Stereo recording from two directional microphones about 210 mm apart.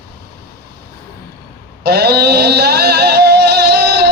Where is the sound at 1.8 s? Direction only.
50° right (ahead or behind).